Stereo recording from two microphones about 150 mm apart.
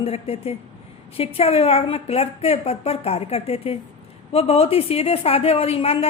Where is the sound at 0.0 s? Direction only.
40° left (ahead or behind).